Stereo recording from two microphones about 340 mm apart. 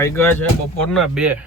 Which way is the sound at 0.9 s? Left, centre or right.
Centre.